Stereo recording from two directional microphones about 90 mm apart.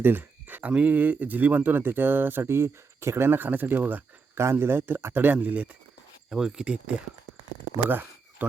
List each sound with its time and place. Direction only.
0.0 s speech: 20° right (ahead or behind)
6.3 s speech: 10° right (ahead or behind)
7.9 s a sound: 20° right (ahead or behind)